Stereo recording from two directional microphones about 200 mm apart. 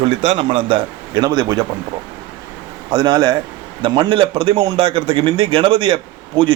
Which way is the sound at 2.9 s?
20° right (ahead or behind).